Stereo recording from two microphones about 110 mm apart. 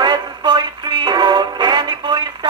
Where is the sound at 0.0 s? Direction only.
40° right (ahead or behind).